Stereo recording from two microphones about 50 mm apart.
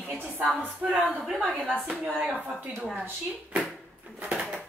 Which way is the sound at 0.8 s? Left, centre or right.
Centre.